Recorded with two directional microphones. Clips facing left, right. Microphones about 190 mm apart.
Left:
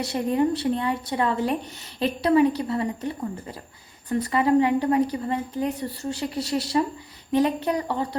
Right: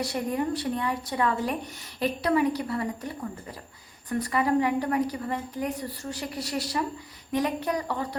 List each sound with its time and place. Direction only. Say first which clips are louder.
0.0 s a woman's voice: left 5 dB; 25° left (ahead or behind)
4.2 s a woman's voice: left 4 dB; 25° left (ahead or behind)